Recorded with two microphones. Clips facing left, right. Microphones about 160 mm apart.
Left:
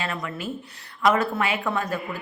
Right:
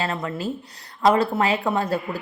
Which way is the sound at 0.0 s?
30° right (ahead or behind).